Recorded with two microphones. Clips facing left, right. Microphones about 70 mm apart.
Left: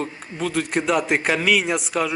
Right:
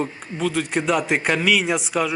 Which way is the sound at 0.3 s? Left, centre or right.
Centre.